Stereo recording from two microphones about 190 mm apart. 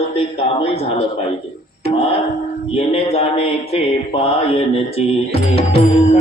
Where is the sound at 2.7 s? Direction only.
30° left (ahead or behind).